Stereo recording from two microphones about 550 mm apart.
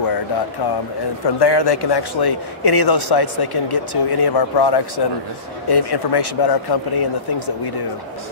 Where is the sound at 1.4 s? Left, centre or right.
Left.